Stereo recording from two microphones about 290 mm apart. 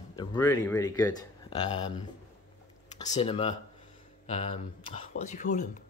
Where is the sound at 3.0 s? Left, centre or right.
Centre.